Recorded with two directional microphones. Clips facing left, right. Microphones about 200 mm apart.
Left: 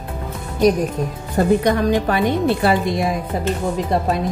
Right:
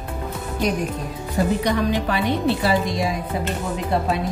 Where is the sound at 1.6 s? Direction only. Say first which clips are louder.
Left 4 dB; 50° left (ahead or behind).